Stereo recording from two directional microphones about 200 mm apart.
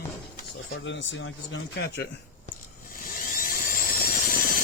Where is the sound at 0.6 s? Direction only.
65° left (ahead or behind).